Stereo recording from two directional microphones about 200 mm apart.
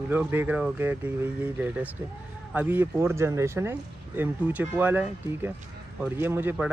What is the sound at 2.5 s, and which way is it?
Speech, 10° right (ahead or behind).